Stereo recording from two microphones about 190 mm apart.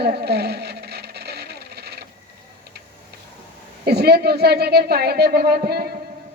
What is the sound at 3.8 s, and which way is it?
Speech, 55° right (ahead or behind).